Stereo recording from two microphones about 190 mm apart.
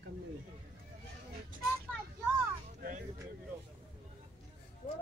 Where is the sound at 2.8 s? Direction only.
50° right (ahead or behind).